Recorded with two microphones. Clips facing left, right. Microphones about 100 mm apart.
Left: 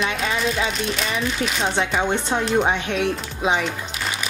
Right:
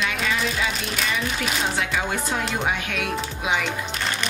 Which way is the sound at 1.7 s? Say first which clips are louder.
Left 4 dB; 30° left (ahead or behind).